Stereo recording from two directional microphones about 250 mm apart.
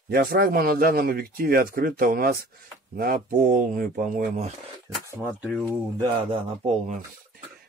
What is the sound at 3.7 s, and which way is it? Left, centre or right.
Speech, right.